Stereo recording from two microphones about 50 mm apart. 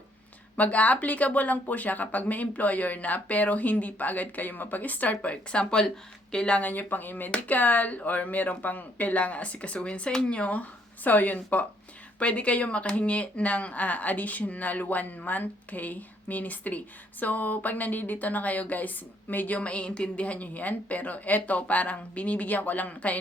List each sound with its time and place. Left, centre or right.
0.5 s speech: left
6.6 s speech: left
7.3 s speech: left